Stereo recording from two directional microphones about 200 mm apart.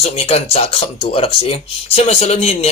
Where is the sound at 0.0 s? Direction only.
30° left (ahead or behind).